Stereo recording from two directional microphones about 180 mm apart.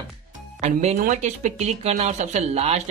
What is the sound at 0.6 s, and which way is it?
Speech, 40° right (ahead or behind).